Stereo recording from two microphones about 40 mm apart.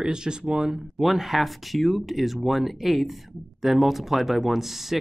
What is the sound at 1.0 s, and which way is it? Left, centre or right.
Speech, centre.